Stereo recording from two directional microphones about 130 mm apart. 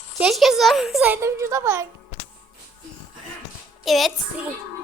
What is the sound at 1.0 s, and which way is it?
Speech, 20° right (ahead or behind).